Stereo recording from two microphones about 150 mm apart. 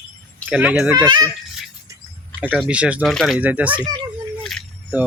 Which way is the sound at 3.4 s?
10° right (ahead or behind).